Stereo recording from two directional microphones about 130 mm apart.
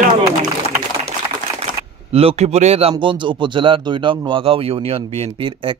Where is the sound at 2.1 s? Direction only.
50° right (ahead or behind).